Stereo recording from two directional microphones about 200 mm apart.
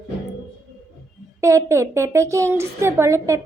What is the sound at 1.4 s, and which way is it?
A woman's voice, 15° right (ahead or behind).